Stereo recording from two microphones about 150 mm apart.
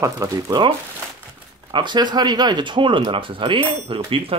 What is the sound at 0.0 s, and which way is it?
Speech, 25° right (ahead or behind).